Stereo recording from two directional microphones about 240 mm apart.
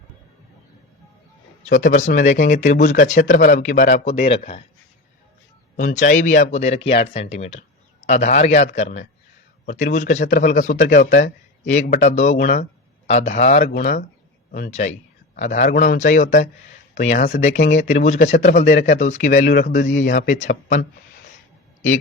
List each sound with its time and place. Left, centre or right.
1.6 s speech: left
5.7 s a man's voice: left